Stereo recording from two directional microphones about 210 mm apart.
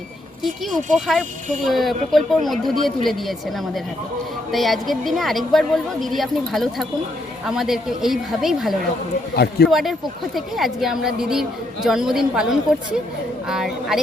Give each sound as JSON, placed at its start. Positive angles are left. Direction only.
{"t": 0.4, "sound": "a woman's voice", "side_deg": 0}
{"t": 4.5, "sound": "a woman's voice", "side_deg": 0}
{"t": 9.3, "sound": "a man's voice", "side_deg": 50}
{"t": 9.6, "sound": "a woman's voice", "side_deg": 0}